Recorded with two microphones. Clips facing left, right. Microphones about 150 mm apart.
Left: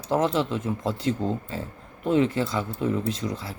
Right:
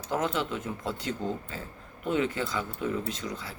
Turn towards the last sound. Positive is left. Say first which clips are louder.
# left 6 dB
turn(degrees=30)  # may be behind; listen again after turning